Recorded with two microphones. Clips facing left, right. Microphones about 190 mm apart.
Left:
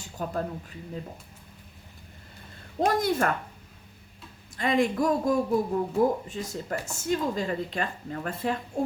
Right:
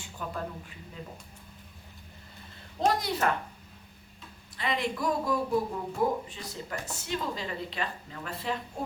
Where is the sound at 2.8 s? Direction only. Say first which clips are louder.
Left 4 dB; 50° left (ahead or behind).